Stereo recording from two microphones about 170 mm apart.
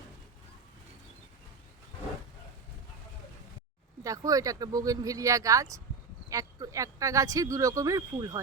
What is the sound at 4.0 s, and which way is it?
Speech, 20° right (ahead or behind).